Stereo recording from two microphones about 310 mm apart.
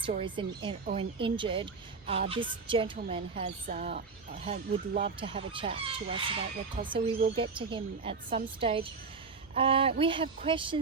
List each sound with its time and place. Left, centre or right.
0.0 s a woman's voice: centre